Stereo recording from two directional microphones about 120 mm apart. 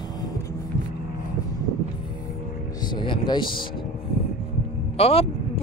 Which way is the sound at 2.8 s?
40° left (ahead or behind).